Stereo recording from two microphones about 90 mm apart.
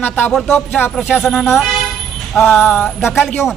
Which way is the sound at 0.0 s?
15° left (ahead or behind).